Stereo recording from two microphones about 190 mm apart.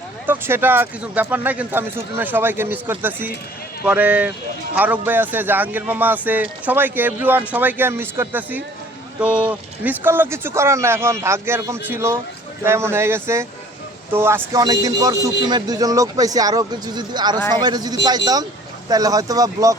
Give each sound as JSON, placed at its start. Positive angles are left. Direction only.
{"t": 0.3, "sound": "a man's voice", "side_deg": -10}